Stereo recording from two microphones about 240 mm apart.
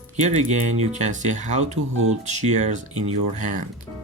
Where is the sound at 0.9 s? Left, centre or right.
Right.